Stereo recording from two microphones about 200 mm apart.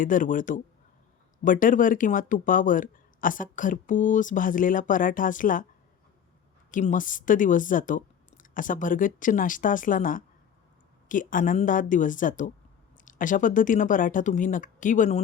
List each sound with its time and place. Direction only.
0.0 s speech: 40° left (ahead or behind)
6.7 s speech: 40° left (ahead or behind)